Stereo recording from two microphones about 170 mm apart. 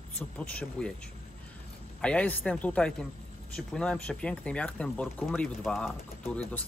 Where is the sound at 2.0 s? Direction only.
5° left (ahead or behind).